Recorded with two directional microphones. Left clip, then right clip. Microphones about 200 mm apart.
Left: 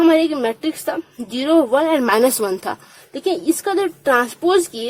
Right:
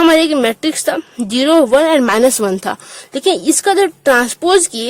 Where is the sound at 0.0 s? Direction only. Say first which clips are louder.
Right 4 dB; 45° right (ahead or behind).